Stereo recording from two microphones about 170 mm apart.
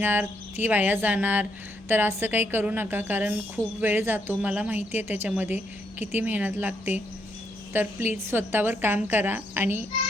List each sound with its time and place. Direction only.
0.0 s a woman's voice: 10° right (ahead or behind)